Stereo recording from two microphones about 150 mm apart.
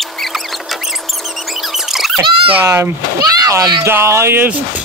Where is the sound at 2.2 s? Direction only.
35° right (ahead or behind).